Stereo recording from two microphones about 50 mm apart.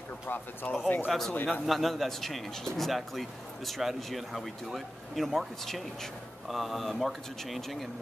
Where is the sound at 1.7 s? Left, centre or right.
Centre.